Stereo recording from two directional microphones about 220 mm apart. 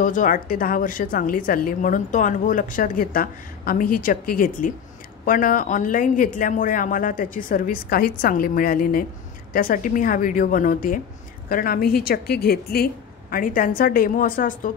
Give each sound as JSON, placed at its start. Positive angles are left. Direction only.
{"t": 0.0, "sound": "a woman's voice", "side_deg": 35}